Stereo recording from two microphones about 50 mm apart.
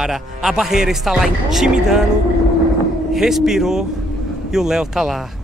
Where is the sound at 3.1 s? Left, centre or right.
Centre.